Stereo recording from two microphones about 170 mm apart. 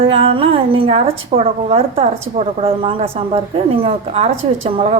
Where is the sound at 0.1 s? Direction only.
35° right (ahead or behind).